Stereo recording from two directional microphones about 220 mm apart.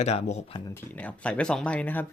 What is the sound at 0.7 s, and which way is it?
Speech, 5° left (ahead or behind).